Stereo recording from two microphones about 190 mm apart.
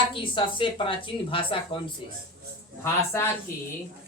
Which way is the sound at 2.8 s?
15° left (ahead or behind).